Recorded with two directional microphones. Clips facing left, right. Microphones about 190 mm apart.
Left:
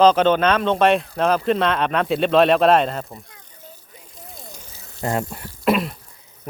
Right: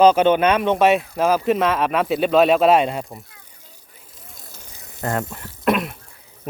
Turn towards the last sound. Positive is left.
turn(degrees=0)  # may be behind; listen again after turning